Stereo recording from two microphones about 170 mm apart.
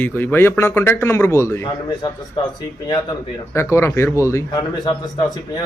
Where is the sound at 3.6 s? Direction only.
15° left (ahead or behind).